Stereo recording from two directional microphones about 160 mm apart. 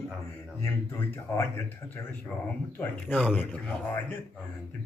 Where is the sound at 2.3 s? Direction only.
Centre (ahead or behind).